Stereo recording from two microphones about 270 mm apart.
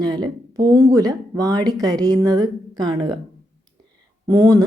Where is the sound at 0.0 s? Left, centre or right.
Centre.